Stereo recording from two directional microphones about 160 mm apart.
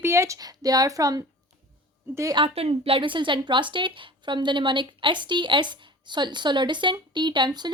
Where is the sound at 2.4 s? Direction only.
40° right (ahead or behind).